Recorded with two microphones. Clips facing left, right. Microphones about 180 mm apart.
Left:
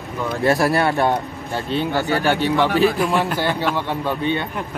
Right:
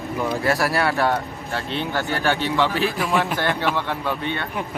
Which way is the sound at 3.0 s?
Centre (ahead or behind).